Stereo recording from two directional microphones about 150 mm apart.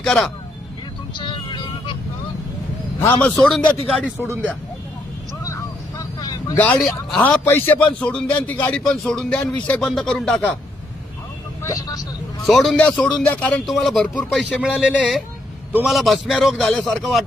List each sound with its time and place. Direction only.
0.0 s a man's voice: centre (ahead or behind)
1.1 s music: 30° left (ahead or behind)
3.0 s a man's voice: 15° left (ahead or behind)
3.4 s a man's voice: 5° left (ahead or behind)
5.4 s vehicle: 20° left (ahead or behind)
6.8 s a man's voice: centre (ahead or behind)
11.6 s speech: 25° left (ahead or behind)
12.4 s a man's voice: 5° left (ahead or behind)